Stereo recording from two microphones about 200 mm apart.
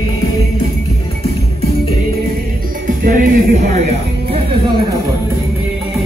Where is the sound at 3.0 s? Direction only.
45° right (ahead or behind).